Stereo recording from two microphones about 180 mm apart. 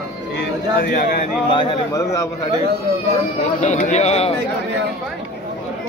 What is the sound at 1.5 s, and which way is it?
Speech, 25° left (ahead or behind).